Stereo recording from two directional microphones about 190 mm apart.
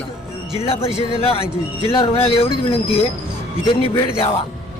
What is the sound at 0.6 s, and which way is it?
A man's voice, 30° left (ahead or behind).